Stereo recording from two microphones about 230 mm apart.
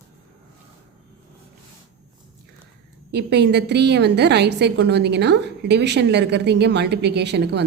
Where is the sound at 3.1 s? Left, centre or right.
Right.